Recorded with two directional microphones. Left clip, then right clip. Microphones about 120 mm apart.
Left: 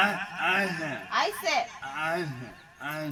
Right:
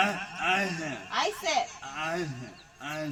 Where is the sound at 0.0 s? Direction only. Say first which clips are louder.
Left 2 dB; 30° right (ahead or behind).